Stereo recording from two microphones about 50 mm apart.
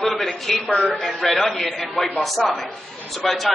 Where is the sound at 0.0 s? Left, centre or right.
Centre.